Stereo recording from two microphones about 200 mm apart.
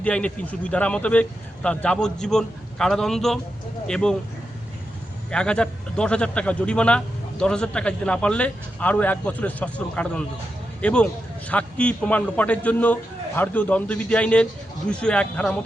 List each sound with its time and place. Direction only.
0.0 s a man's voice: 5° left (ahead or behind)
5.3 s a man's voice: 5° left (ahead or behind)